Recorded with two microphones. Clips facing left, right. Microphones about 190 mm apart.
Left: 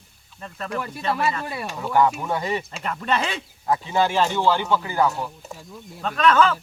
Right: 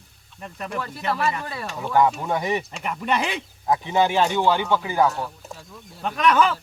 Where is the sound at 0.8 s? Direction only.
15° left (ahead or behind).